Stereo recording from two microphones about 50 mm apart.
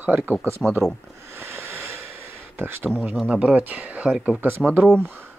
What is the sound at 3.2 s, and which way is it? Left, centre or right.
Speech, right.